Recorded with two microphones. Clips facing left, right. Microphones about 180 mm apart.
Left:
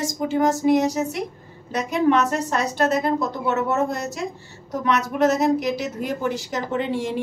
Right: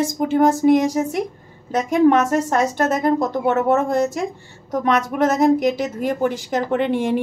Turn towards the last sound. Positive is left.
turn(degrees=-60)  # may be behind; listen again after turning